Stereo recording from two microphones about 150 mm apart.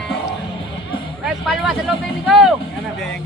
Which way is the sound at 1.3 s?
5° right (ahead or behind).